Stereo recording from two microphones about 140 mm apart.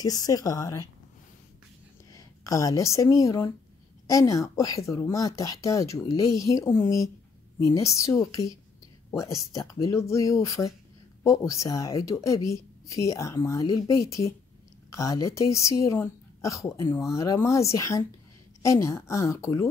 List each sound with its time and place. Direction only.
0.0 s speech: 25° left (ahead or behind)
2.1 s speech: 25° left (ahead or behind)